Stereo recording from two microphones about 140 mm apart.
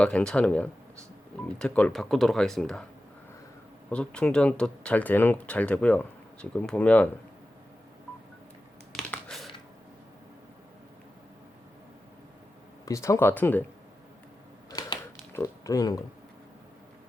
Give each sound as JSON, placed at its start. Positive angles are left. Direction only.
{"t": 0.0, "sound": "speech", "side_deg": 5}
{"t": 3.8, "sound": "speech", "side_deg": 10}
{"t": 8.9, "sound": "computer keyboard", "side_deg": 10}
{"t": 12.8, "sound": "speech", "side_deg": 20}
{"t": 14.7, "sound": "typewriter", "side_deg": 25}
{"t": 15.3, "sound": "speech", "side_deg": 20}